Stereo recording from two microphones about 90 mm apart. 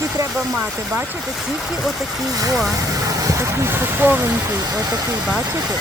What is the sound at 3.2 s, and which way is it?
Speech, 30° right (ahead or behind).